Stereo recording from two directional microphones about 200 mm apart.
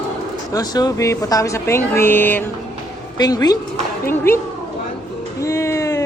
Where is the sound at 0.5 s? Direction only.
20° left (ahead or behind).